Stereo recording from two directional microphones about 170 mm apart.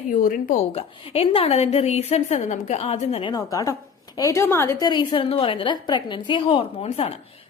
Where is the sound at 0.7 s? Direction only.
35° left (ahead or behind).